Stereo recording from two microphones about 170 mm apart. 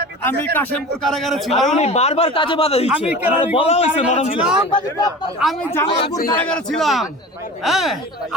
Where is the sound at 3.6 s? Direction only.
35° left (ahead or behind).